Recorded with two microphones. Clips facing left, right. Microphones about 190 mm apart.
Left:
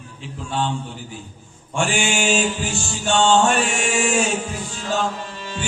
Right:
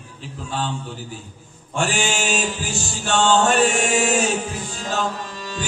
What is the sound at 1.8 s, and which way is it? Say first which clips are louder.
Music: left 1 dB; 40° right (ahead or behind).